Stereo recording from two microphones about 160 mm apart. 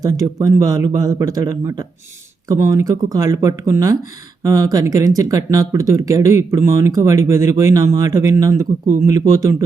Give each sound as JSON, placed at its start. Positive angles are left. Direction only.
{"t": 0.0, "sound": "speech", "side_deg": -20}